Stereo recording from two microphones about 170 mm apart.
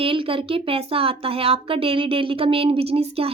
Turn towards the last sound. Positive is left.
turn(degrees=-35)  # may be behind; listen again after turning